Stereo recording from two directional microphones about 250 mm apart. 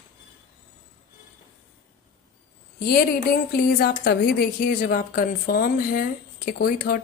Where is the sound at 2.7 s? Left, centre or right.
Left.